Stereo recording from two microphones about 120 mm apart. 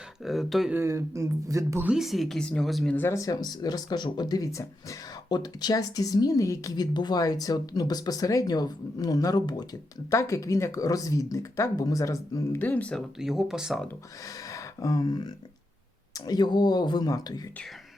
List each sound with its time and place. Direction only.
0.3 s speech: centre (ahead or behind)
0.7 s speech: 25° right (ahead or behind)
1.8 s speech: 5° right (ahead or behind)
2.9 s speech: 20° left (ahead or behind)
10.1 s speech: 25° left (ahead or behind)
12.5 s speech: 15° left (ahead or behind)
13.1 s speech: 5° right (ahead or behind)
14.3 s a sound: 30° left (ahead or behind)
16.1 s speech: 35° left (ahead or behind)